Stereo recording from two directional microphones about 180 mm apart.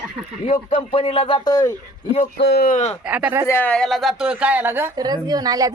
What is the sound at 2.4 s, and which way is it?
Speech, 70° left (ahead or behind).